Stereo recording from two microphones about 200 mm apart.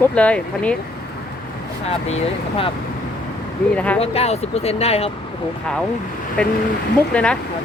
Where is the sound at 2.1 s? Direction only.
30° left (ahead or behind).